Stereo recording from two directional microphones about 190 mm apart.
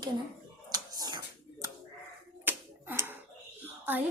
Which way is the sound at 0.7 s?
20° right (ahead or behind).